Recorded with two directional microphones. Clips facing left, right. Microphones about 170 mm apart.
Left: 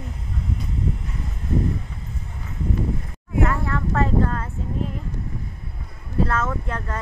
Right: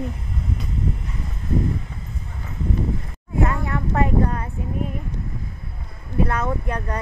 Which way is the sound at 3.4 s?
20° right (ahead or behind).